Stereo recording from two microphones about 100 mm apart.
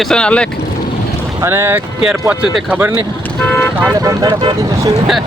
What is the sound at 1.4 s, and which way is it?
Speech, 25° right (ahead or behind).